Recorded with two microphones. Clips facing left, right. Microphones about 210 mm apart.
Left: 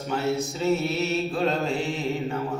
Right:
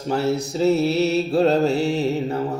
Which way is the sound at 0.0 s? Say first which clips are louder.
Right 4 dB; 35° right (ahead or behind).